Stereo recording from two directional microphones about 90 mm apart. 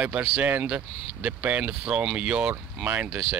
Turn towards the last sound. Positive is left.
turn(degrees=-15)  # may be behind; listen again after turning